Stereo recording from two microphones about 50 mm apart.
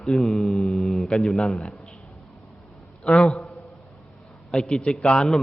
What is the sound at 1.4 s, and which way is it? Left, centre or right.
Speech, centre.